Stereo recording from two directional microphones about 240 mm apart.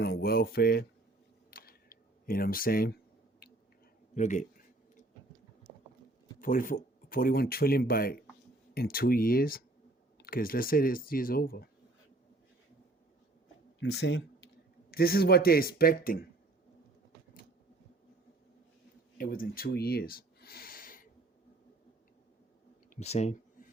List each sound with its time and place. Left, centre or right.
0.0 s speech: left
1.5 s a sound: left
4.1 s speech: left
6.4 s speech: left
13.7 s speech: left
19.1 s speech: left
22.9 s speech: left